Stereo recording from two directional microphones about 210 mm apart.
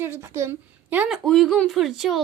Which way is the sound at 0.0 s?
10° right (ahead or behind).